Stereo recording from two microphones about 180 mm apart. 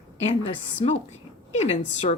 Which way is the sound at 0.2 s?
35° left (ahead or behind).